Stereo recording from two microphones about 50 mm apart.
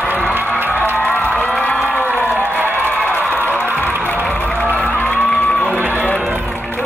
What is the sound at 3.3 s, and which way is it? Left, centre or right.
Music, left.